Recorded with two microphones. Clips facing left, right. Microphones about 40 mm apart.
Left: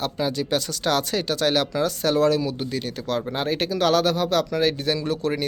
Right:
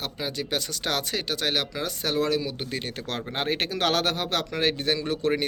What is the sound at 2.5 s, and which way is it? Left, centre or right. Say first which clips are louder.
Speech: left 4 dB; right.